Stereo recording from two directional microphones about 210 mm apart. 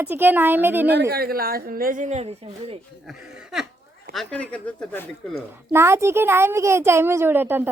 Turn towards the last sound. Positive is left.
turn(degrees=-10)  # may be behind; listen again after turning